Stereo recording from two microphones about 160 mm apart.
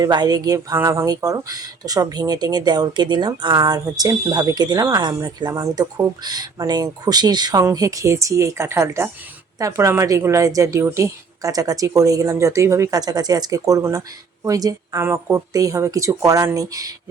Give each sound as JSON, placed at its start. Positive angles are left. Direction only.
{"t": 0.0, "sound": "speech", "side_deg": -25}